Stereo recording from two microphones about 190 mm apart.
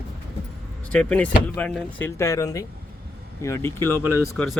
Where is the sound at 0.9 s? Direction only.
5° left (ahead or behind).